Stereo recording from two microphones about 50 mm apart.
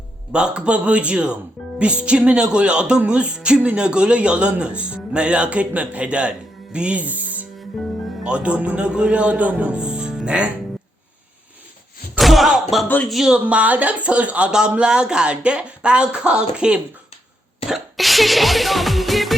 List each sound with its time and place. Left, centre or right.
0.3 s speech: centre
8.2 s speech: right
9.8 s music: centre
12.2 s slam: centre
13.1 s speech: centre
13.4 s speech: right
14.5 s speech: centre
17.7 s music: centre